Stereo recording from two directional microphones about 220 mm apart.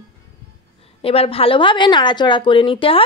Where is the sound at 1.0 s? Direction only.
25° left (ahead or behind).